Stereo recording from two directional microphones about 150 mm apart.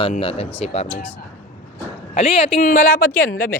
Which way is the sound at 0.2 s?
40° left (ahead or behind).